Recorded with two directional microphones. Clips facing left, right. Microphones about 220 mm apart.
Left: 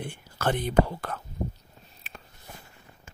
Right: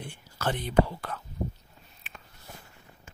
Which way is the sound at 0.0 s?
55° left (ahead or behind).